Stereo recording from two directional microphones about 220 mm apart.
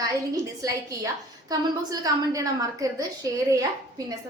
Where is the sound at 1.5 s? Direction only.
15° right (ahead or behind).